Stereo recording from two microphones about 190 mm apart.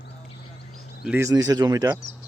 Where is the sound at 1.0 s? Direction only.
10° right (ahead or behind).